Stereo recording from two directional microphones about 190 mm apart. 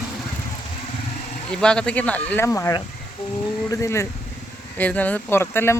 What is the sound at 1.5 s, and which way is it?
Speech, 5° left (ahead or behind).